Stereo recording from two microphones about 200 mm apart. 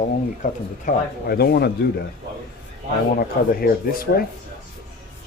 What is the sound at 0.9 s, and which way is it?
Speech, 50° left (ahead or behind).